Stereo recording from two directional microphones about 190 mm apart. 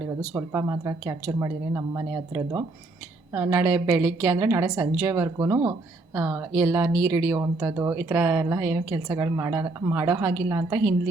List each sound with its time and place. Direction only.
0.3 s speech: 15° right (ahead or behind)